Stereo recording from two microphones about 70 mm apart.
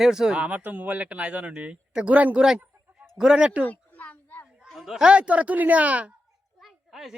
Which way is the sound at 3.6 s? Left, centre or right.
Left.